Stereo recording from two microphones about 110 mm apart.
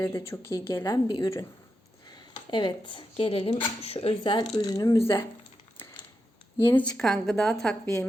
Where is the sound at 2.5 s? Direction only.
50° left (ahead or behind).